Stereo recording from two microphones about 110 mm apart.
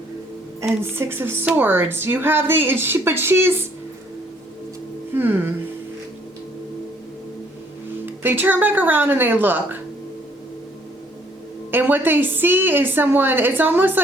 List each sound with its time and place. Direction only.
0.7 s speech: 20° right (ahead or behind)
5.1 s speech: 20° right (ahead or behind)
8.0 s a woman's voice: 15° right (ahead or behind)
11.7 s a woman's voice: 15° right (ahead or behind)